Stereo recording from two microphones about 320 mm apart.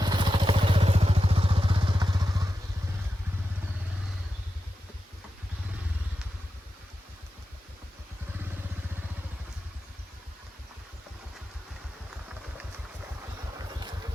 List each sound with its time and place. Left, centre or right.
0.0 s motorcycle: centre
13.7 s vehicle: centre